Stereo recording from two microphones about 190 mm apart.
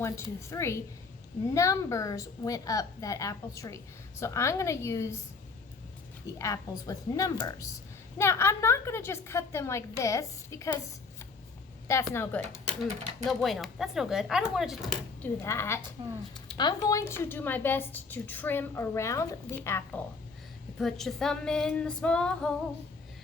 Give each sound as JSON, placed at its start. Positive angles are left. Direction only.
{"t": 0.0, "sound": "a woman's voice", "side_deg": 15}
{"t": 6.2, "sound": "a woman's voice", "side_deg": 15}
{"t": 11.9, "sound": "a woman's voice", "side_deg": 15}
{"t": 13.2, "sound": "speech", "side_deg": 0}
{"t": 15.4, "sound": "a woman's voice", "side_deg": 15}
{"t": 16.0, "sound": "speech", "side_deg": -25}
{"t": 16.6, "sound": "a woman's voice", "side_deg": 20}